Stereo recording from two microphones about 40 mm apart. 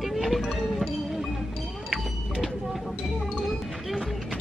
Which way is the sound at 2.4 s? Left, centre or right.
Centre.